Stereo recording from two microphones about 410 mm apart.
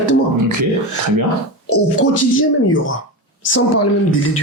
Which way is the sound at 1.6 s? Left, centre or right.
Left.